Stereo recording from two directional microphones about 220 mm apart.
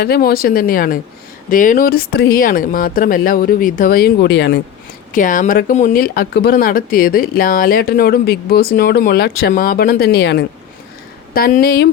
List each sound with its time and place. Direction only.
0.0 s speech: 45° left (ahead or behind)
5.1 s speech: 35° left (ahead or behind)